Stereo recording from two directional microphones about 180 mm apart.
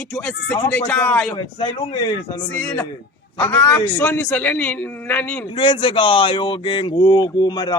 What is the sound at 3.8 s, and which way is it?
A man's voice, 10° left (ahead or behind).